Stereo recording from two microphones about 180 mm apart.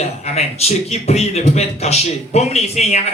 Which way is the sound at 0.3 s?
35° left (ahead or behind).